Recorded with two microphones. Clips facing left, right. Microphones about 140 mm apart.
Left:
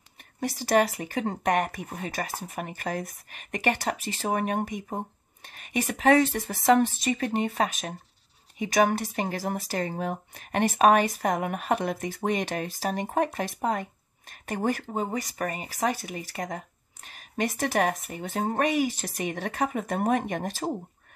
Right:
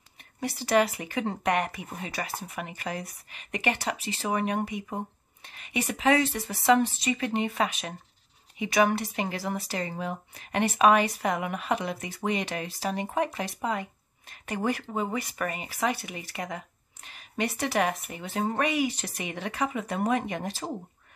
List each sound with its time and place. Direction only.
0.4 s speech: 40° left (ahead or behind)